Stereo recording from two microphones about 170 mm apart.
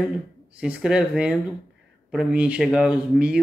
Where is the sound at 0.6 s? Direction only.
5° right (ahead or behind).